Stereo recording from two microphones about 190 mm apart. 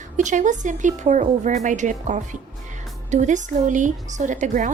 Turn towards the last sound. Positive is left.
turn(degrees=-40)  # may be behind; listen again after turning